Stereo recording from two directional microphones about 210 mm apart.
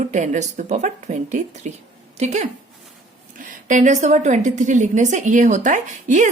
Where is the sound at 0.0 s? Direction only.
35° right (ahead or behind).